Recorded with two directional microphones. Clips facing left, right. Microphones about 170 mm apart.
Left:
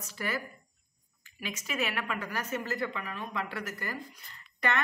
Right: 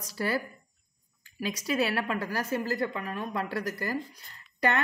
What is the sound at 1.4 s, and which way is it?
A woman's voice, 35° right (ahead or behind).